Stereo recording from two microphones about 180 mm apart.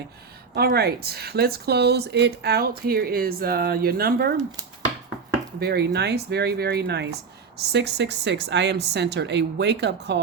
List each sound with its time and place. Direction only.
0.5 s speech: 60° right (ahead or behind)
5.5 s speech: 65° right (ahead or behind)